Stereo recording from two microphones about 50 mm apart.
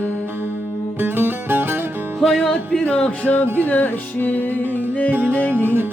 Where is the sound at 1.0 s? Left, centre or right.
Right.